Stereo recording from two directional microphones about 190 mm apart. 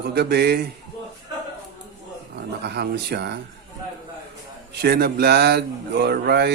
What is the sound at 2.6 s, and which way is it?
Speech, 60° right (ahead or behind).